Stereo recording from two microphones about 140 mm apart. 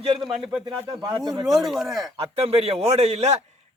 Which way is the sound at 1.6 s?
Centre (ahead or behind).